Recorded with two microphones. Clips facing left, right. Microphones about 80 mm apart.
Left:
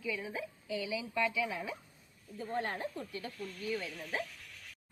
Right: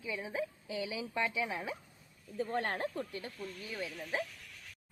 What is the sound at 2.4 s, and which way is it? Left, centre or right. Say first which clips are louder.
Speech: right 2 dB; right.